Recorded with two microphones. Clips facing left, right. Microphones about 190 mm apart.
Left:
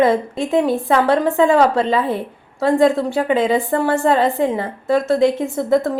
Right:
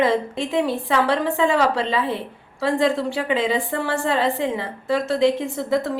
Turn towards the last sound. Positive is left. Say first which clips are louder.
# left 5 dB
turn(degrees=45)  # may be behind; listen again after turning